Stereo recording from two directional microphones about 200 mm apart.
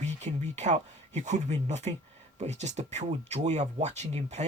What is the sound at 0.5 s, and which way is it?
Speech, 35° right (ahead or behind).